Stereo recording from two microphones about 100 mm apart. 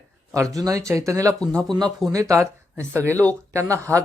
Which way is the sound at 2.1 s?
30° right (ahead or behind).